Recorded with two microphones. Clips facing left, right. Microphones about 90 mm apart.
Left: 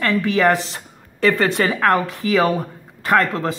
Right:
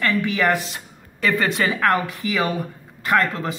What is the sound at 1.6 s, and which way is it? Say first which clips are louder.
A woman's voice: left 3 dB; 35° left (ahead or behind).